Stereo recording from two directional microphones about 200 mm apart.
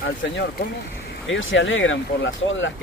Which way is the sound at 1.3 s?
75° left (ahead or behind).